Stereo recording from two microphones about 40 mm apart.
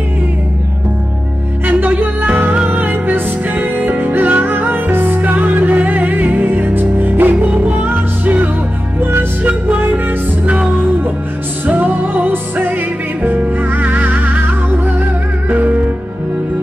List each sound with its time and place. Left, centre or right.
2.7 s music: right
7.3 s music: right
9.8 s music: right
11.6 s music: right
15.5 s music: right